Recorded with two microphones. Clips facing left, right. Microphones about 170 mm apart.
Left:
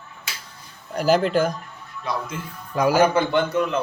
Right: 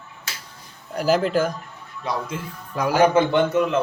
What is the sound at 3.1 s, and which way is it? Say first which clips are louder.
Speech: right 2 dB; 20° right (ahead or behind).